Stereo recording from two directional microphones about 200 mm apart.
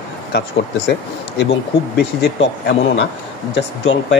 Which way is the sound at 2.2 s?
60° left (ahead or behind).